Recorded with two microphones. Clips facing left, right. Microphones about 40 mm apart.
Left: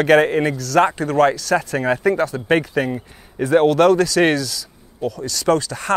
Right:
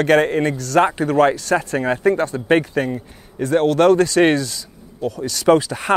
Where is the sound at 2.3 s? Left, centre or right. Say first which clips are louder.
Right 1 dB; centre.